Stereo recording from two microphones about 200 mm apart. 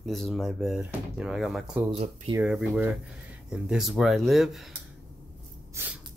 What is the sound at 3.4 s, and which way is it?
Speech, 5° right (ahead or behind).